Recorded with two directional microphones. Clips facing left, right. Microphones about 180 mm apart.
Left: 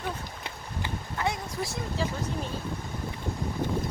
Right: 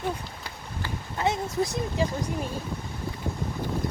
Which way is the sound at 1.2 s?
20° right (ahead or behind).